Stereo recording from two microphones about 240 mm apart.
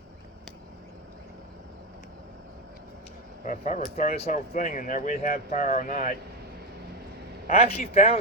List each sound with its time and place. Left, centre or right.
3.4 s speech: left
7.4 s speech: left